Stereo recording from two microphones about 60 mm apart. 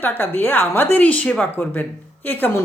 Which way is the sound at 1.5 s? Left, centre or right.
Left.